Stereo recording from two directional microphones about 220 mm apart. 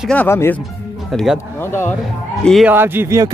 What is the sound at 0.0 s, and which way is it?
Speech, 5° left (ahead or behind).